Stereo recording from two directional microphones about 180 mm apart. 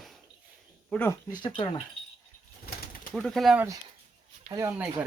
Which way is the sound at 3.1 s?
Centre (ahead or behind).